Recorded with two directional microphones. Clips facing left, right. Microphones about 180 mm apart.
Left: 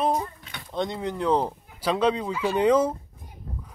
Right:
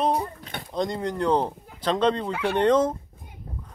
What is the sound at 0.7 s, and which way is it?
Speech, centre (ahead or behind).